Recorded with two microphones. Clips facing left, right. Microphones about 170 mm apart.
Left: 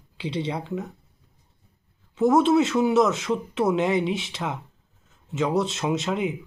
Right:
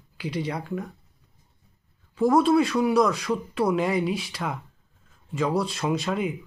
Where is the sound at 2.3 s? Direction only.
20° left (ahead or behind).